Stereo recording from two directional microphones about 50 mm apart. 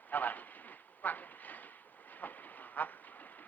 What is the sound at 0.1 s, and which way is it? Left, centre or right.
Train, left.